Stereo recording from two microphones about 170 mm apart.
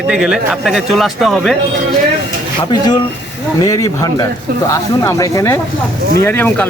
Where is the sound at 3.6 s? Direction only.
20° left (ahead or behind).